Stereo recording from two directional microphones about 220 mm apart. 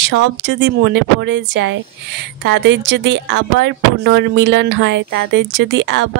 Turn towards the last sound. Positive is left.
turn(degrees=-55)  # may be behind; listen again after turning